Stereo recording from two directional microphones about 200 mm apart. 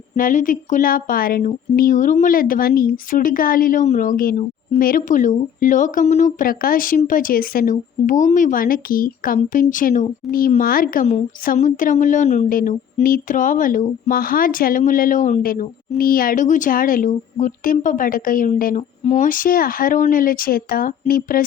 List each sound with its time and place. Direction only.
0.2 s speech: 40° left (ahead or behind)